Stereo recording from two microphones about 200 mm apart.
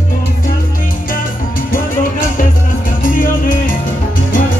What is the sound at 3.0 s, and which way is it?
Music, 45° left (ahead or behind).